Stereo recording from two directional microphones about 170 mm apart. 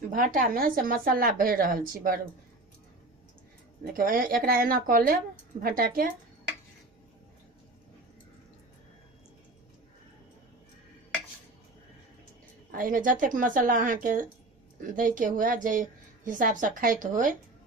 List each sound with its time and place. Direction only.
0.1 s speech: 55° right (ahead or behind)
3.8 s speech: 55° right (ahead or behind)
12.7 s a woman's voice: 55° right (ahead or behind)